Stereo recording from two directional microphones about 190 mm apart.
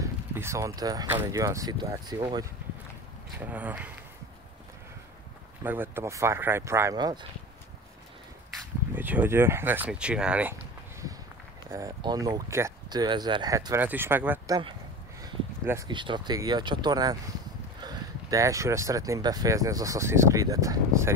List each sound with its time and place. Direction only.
0.0 s speech: 15° right (ahead or behind)
3.3 s speech: 10° right (ahead or behind)
5.6 s speech: 10° right (ahead or behind)
8.9 s speech: 10° right (ahead or behind)
15.9 s speech: 25° right (ahead or behind)